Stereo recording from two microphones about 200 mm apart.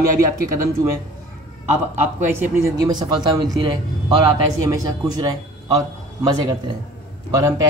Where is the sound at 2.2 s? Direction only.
10° right (ahead or behind).